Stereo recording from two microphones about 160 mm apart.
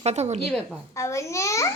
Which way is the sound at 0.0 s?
40° right (ahead or behind).